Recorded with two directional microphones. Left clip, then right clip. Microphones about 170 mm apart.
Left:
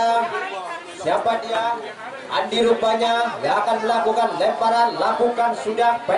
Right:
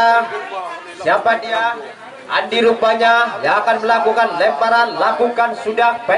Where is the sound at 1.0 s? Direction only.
25° right (ahead or behind).